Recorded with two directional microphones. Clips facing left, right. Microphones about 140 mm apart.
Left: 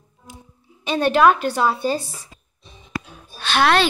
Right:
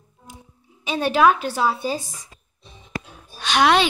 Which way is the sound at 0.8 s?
5° right (ahead or behind).